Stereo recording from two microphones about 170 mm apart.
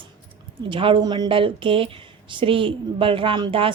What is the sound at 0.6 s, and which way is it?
A woman's voice, 30° right (ahead or behind).